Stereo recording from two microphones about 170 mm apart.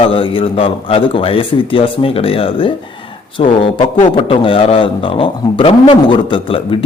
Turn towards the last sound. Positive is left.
turn(degrees=30)  # may be behind; listen again after turning